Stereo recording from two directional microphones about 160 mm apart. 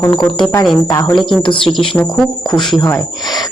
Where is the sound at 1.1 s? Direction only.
Centre (ahead or behind).